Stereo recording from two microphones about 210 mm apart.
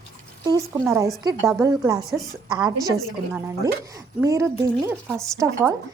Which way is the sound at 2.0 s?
Centre (ahead or behind).